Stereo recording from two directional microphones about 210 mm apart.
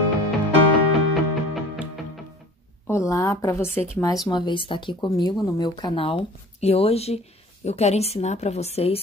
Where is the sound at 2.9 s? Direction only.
15° left (ahead or behind); by 8.9 s 30° left (ahead or behind).